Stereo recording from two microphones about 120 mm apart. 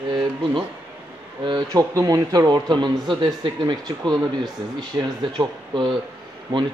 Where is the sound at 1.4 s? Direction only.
35° right (ahead or behind).